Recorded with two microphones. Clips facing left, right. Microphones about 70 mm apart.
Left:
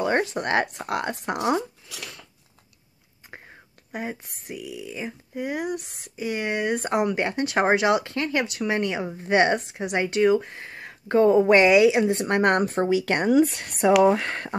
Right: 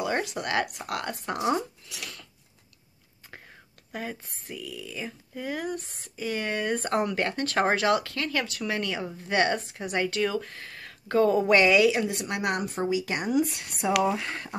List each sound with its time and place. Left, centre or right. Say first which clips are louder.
0.0 s a sound: left 5 dB; left
0.3 s speech: left 4 dB; left
3.3 s speech: left 3 dB; left